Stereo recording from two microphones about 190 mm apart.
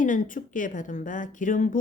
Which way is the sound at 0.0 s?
45° left (ahead or behind).